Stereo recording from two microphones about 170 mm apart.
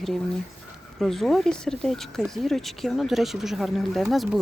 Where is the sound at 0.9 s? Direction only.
Centre (ahead or behind).